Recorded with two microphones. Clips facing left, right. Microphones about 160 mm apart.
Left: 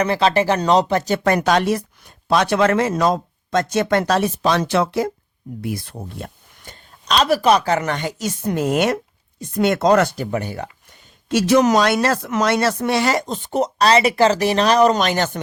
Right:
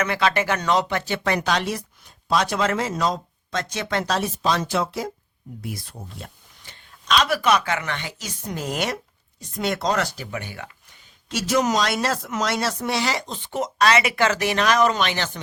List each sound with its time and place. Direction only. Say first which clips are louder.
0.0 s a woman's voice: left 5 dB; 30° left (ahead or behind); by 1.8 s 50° left (ahead or behind)
2.2 s speech: left 6 dB; 60° left (ahead or behind)
7.1 s a woman's voice: left 4 dB; 40° left (ahead or behind); by 10.1 s 55° left (ahead or behind)
10.3 s a woman's voice: left 7 dB; 40° left (ahead or behind)
11.3 s speech: left 7 dB; 60° left (ahead or behind)